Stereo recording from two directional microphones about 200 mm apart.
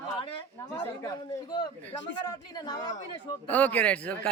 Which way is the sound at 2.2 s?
20° left (ahead or behind).